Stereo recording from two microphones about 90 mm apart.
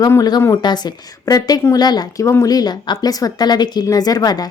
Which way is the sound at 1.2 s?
40° left (ahead or behind).